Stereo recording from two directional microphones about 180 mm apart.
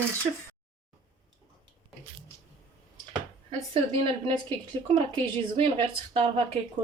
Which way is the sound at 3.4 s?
30° right (ahead or behind).